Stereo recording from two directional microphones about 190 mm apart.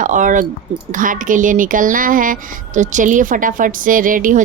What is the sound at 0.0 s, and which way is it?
A woman's voice, 40° right (ahead or behind).